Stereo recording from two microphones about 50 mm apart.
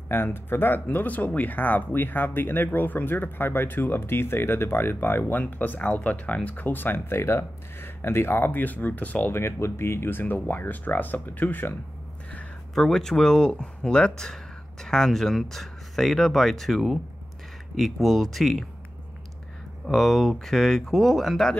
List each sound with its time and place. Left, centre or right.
0.1 s speech: left
0.9 s speech: left
5.2 s speech: left
9.3 s speech: left
12.7 s speech: centre
19.9 s speech: centre